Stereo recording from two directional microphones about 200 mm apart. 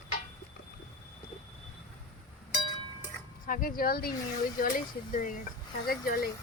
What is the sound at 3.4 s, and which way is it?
Speech, 45° left (ahead or behind).